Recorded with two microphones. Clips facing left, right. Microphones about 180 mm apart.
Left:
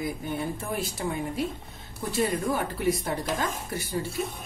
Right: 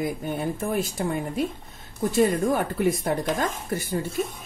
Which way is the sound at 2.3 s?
50° right (ahead or behind).